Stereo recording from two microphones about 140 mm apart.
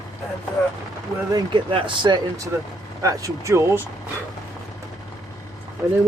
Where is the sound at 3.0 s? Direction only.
20° right (ahead or behind).